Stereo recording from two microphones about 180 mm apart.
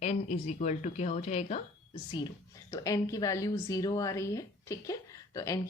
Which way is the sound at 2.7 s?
20° left (ahead or behind).